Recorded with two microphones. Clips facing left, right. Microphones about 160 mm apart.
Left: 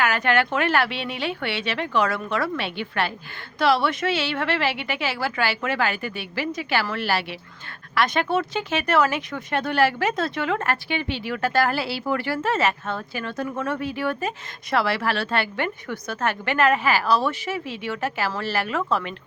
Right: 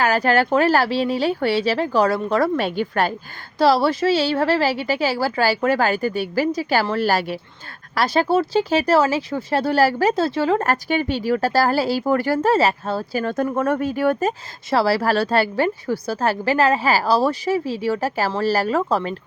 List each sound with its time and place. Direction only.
0.0 s speech: 35° right (ahead or behind)